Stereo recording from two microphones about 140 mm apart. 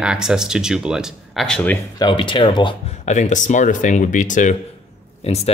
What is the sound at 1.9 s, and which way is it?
Speech, 35° left (ahead or behind).